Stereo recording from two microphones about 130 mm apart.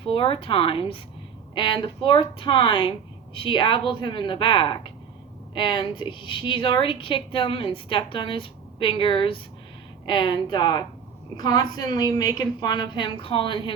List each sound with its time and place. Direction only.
0.0 s a woman's voice: 45° left (ahead or behind)